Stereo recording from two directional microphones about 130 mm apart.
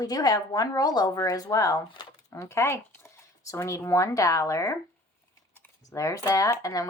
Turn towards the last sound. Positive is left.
turn(degrees=25)  # may be behind; listen again after turning